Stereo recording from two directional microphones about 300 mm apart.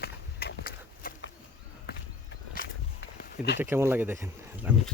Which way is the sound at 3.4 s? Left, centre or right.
Centre.